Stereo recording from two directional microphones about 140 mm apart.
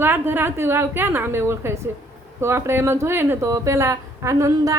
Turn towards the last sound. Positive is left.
turn(degrees=-20)  # may be behind; listen again after turning